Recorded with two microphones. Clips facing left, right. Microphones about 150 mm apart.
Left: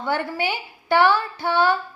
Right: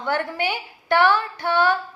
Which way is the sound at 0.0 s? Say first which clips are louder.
Even; 10° left (ahead or behind).